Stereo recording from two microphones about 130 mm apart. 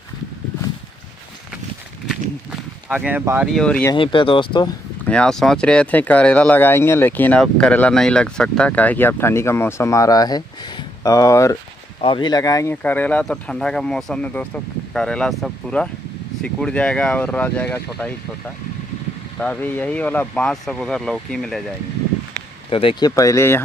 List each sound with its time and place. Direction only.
2.9 s speech: 10° right (ahead or behind)
3.5 s speech: 5° left (ahead or behind)
3.9 s speech: 40° left (ahead or behind)
5.0 s speech: 5° left (ahead or behind); by 11.5 s 25° left (ahead or behind)
12.0 s speech: 40° left (ahead or behind)
12.8 s speech: 15° left (ahead or behind)
19.4 s speech: 10° left (ahead or behind)
22.7 s speech: 45° left (ahead or behind)
23.0 s speech: 25° left (ahead or behind)